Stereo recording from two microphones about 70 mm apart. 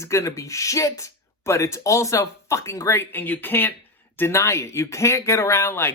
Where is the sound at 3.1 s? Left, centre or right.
Left.